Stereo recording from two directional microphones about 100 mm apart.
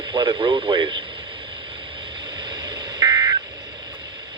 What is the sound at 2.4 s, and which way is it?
Telephone dialing, 45° right (ahead or behind).